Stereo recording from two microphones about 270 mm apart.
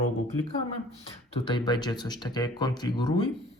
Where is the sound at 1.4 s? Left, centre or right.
Centre.